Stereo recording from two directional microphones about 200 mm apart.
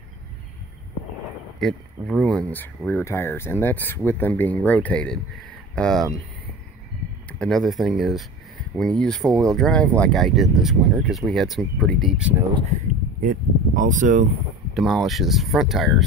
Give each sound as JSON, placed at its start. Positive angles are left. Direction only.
{"t": 1.6, "sound": "speech", "side_deg": 0}
{"t": 7.2, "sound": "speech", "side_deg": 5}
{"t": 13.2, "sound": "speech", "side_deg": -40}
{"t": 14.7, "sound": "speech", "side_deg": 0}